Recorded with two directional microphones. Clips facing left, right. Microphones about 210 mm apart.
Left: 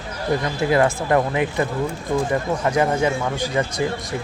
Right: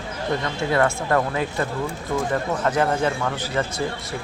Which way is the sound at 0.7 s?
20° left (ahead or behind).